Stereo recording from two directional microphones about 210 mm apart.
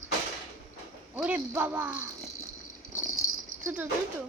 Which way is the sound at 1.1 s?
10° right (ahead or behind).